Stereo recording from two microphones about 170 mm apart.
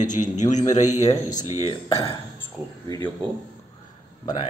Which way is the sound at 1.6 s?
30° left (ahead or behind).